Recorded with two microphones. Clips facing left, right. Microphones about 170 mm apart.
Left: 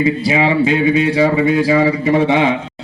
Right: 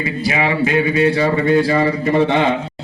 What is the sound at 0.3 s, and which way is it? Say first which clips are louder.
Speech: even; 25° left (ahead or behind).